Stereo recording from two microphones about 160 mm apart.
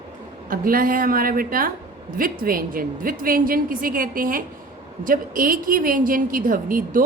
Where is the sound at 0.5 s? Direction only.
60° right (ahead or behind).